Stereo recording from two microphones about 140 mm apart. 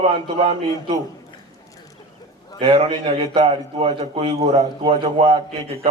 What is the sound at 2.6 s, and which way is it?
A man's voice, 40° right (ahead or behind).